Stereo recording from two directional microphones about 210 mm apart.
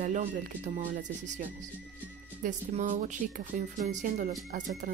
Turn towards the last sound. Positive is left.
turn(degrees=-40)  # may be behind; listen again after turning